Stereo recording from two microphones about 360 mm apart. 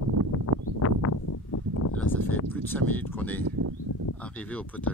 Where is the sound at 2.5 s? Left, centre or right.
Centre.